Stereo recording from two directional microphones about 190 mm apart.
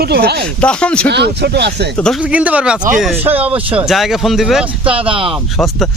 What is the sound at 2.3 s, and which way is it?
Speech, 5° right (ahead or behind).